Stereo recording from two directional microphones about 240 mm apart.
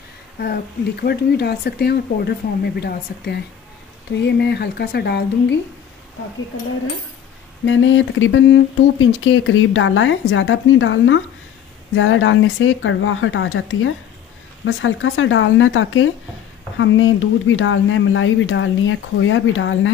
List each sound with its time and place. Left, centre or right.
1.0 s speech: left
7.6 s speech: left